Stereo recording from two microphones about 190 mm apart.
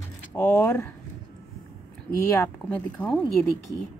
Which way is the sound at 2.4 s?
10° left (ahead or behind).